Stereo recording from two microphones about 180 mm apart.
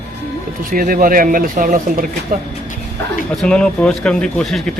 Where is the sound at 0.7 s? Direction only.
50° right (ahead or behind).